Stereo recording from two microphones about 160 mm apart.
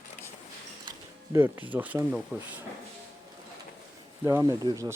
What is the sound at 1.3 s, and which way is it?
Speech, 15° right (ahead or behind).